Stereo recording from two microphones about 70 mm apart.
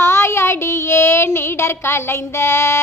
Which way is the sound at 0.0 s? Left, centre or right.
Left.